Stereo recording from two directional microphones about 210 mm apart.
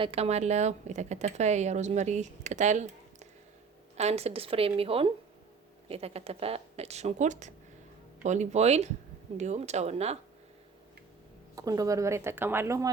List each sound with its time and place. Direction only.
0.0 s speech: 30° right (ahead or behind)
11.5 s speech: 15° right (ahead or behind)